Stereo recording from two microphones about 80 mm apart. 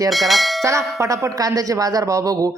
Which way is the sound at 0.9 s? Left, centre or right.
Right.